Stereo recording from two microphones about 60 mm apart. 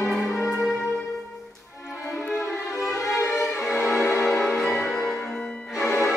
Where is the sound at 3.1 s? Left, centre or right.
Left.